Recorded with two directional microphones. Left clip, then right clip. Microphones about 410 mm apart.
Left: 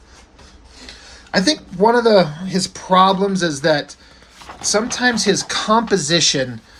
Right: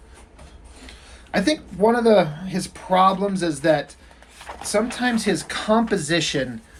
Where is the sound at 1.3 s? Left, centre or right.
Centre.